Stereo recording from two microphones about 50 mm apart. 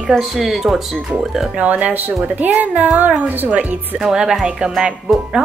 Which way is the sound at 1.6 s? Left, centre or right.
Right.